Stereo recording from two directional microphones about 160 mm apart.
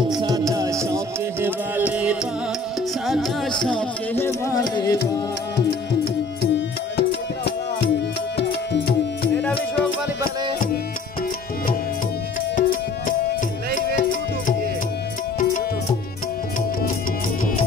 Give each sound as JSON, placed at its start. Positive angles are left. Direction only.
{"t": 0.1, "sound": "music", "side_deg": -25}
{"t": 3.6, "sound": "music", "side_deg": 10}
{"t": 7.0, "sound": "music", "side_deg": 90}
{"t": 12.5, "sound": "music", "side_deg": 55}